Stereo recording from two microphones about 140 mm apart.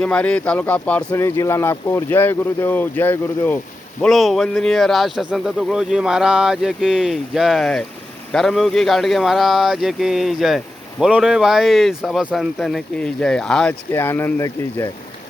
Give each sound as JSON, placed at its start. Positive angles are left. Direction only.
{"t": 0.0, "sound": "speech", "side_deg": 5}
{"t": 4.0, "sound": "speech", "side_deg": 0}
{"t": 13.9, "sound": "speech", "side_deg": 15}